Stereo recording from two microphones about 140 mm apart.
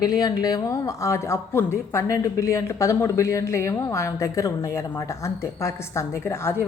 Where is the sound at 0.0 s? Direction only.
25° left (ahead or behind).